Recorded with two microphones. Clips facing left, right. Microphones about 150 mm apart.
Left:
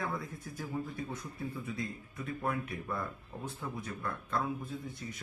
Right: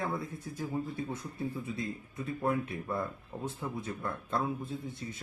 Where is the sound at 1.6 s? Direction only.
25° right (ahead or behind).